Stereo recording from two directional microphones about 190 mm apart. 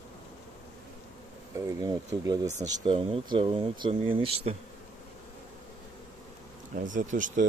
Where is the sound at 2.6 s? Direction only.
30° right (ahead or behind).